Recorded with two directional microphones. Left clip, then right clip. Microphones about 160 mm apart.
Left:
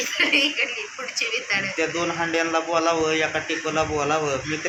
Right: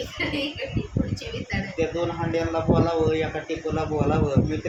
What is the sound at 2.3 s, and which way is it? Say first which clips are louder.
A man's voice: even; 15° left (ahead or behind).